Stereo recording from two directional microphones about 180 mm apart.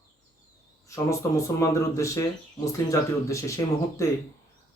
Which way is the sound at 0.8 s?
15° left (ahead or behind).